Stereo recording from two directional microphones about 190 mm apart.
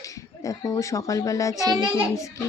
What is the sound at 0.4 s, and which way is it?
Speech, 15° left (ahead or behind).